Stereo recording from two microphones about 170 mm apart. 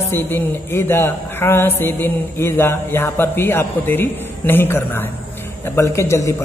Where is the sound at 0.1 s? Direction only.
15° left (ahead or behind).